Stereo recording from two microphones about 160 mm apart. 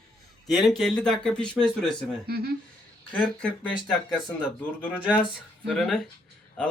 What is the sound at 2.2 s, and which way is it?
Speech, 75° right (ahead or behind).